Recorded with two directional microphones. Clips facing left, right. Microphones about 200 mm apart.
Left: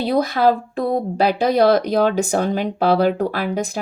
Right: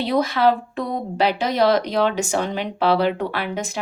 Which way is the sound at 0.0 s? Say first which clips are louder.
Left 2 dB; 40° left (ahead or behind).